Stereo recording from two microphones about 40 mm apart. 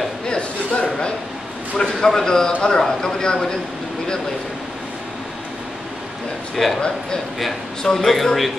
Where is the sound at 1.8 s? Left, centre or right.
Centre.